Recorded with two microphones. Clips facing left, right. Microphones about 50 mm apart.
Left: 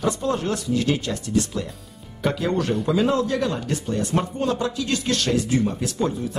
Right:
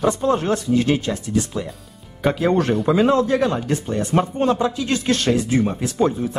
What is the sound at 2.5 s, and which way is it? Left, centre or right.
Speech, right.